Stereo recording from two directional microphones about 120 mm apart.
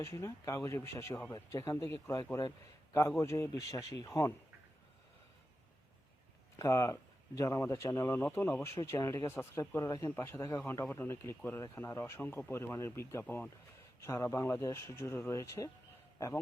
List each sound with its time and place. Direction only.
0.0 s speech: 25° left (ahead or behind)
6.6 s speech: 25° left (ahead or behind)